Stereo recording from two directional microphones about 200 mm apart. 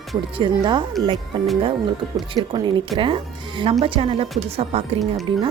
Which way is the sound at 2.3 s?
20° right (ahead or behind).